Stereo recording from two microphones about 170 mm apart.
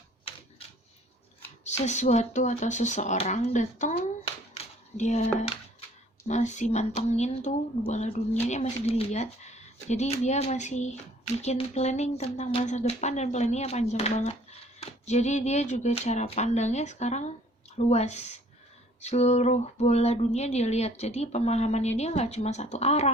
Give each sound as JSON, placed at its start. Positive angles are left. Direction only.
{"t": 1.6, "sound": "speech", "side_deg": 45}